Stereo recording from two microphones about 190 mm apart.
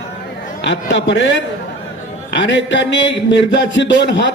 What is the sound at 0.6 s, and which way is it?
A man's voice, 70° left (ahead or behind).